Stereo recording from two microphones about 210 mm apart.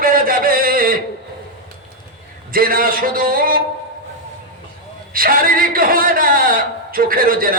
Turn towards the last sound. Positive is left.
turn(degrees=-45)  # may be behind; listen again after turning